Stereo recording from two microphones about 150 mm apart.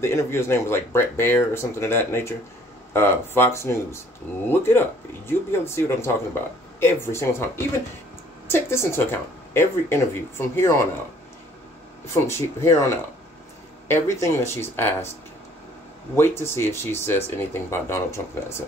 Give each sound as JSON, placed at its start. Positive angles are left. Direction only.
{"t": 0.0, "sound": "speech", "side_deg": 15}
{"t": 12.1, "sound": "speech", "side_deg": 20}
{"t": 16.2, "sound": "speech", "side_deg": 15}